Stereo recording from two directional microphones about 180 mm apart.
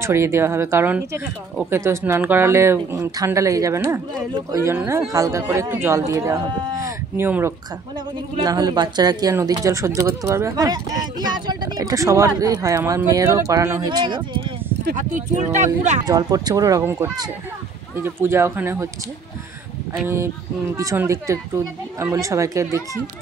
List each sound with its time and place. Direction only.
0.0 s speech: 15° right (ahead or behind)
8.5 s speech: 20° right (ahead or behind)
15.0 s speech: 45° right (ahead or behind)
16.1 s speech: 20° right (ahead or behind)
20.7 s speech: 15° right (ahead or behind)